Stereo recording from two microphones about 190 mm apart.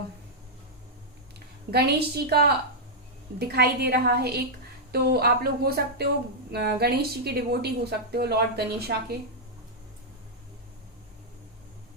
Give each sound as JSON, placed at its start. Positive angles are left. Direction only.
{"t": 1.7, "sound": "a woman's voice", "side_deg": -55}